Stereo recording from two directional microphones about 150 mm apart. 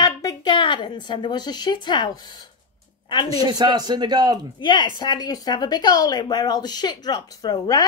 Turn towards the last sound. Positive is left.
turn(degrees=25)  # may be behind; listen again after turning